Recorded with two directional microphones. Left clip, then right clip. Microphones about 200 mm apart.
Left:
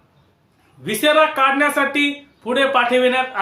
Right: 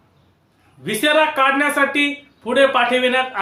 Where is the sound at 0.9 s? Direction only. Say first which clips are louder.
Left 1 dB; 5° left (ahead or behind).